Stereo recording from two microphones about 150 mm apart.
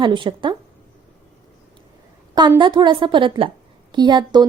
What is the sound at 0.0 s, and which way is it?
Speech, 30° right (ahead or behind).